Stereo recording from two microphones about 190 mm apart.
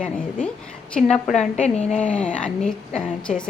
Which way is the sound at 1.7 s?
35° left (ahead or behind).